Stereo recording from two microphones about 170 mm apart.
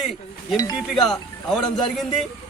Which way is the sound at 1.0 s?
Centre (ahead or behind).